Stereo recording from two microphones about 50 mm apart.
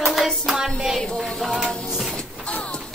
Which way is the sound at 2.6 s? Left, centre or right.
Centre.